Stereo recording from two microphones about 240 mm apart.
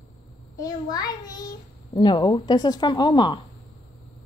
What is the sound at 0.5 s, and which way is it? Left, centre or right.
Speech, centre.